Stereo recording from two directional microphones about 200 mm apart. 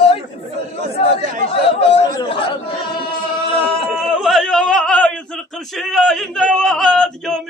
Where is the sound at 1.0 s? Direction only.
25° left (ahead or behind).